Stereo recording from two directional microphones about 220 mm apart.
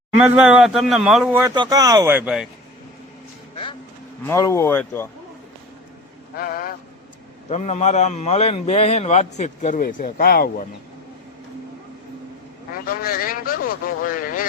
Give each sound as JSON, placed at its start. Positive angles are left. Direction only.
{"t": 0.2, "sound": "a man's voice", "side_deg": -5}
{"t": 4.2, "sound": "speech", "side_deg": 15}
{"t": 6.3, "sound": "a man's voice", "side_deg": 40}
{"t": 7.5, "sound": "a man's voice", "side_deg": 30}
{"t": 12.9, "sound": "a man's voice", "side_deg": 40}